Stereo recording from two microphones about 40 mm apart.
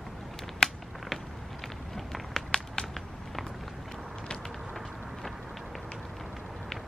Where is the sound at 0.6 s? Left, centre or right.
Centre.